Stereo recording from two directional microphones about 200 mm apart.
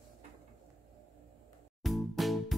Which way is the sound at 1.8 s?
Centre (ahead or behind).